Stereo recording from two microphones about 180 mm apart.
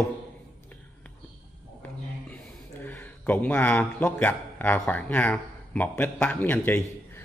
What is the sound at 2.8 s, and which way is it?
A man's voice, 10° left (ahead or behind).